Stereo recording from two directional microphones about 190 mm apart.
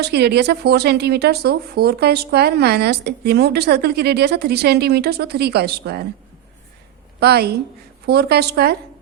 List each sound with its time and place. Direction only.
0.0 s speech: 60° right (ahead or behind)
7.2 s speech: 60° right (ahead or behind)